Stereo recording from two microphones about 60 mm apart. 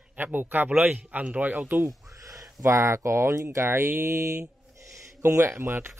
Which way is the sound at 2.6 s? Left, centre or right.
Right.